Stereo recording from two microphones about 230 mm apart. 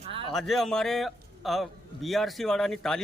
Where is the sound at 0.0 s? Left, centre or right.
Right.